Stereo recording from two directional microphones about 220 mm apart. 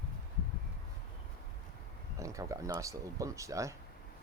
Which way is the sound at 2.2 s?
15° right (ahead or behind).